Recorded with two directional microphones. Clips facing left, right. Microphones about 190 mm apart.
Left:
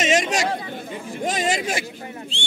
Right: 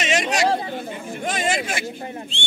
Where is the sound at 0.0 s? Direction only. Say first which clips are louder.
Left 1 dB; 45° left (ahead or behind).